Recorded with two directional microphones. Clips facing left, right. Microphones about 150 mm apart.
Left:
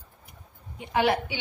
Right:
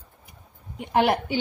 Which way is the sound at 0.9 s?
50° right (ahead or behind).